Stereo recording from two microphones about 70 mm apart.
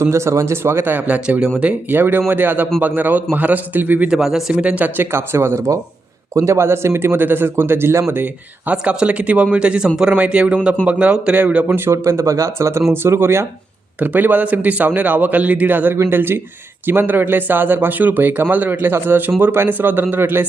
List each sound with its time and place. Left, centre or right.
0.0 s a man's voice: right
4.1 s a man's voice: centre; by 8.0 s right
8.1 s speech: right
11.7 s a man's voice: right
14.0 s a man's voice: right